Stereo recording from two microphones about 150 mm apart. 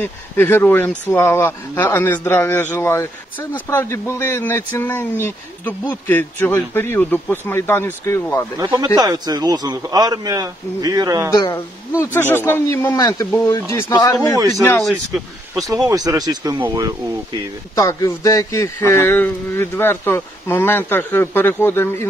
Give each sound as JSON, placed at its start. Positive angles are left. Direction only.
{"t": 0.0, "sound": "speech", "side_deg": 15}
{"t": 8.5, "sound": "a man's voice", "side_deg": -25}
{"t": 11.3, "sound": "speech", "side_deg": 20}
{"t": 14.8, "sound": "speech", "side_deg": 0}
{"t": 15.9, "sound": "a man's voice", "side_deg": -25}
{"t": 17.7, "sound": "speech", "side_deg": 20}